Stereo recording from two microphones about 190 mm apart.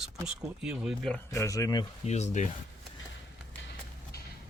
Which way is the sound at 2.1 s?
35° left (ahead or behind).